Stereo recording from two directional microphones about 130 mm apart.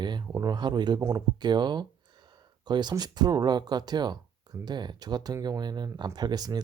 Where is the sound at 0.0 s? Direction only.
35° right (ahead or behind).